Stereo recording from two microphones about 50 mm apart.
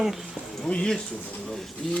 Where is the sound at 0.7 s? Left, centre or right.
Centre.